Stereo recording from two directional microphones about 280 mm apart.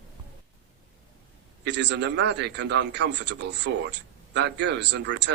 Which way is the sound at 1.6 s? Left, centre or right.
Right.